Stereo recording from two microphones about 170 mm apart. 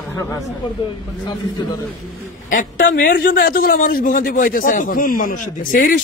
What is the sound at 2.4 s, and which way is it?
A man's voice, 50° left (ahead or behind).